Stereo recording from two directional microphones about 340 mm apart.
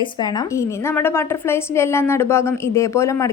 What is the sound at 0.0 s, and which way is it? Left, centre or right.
A woman's voice, centre.